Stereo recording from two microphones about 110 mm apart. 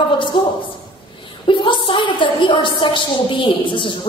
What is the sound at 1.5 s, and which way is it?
A woman's voice, 50° left (ahead or behind).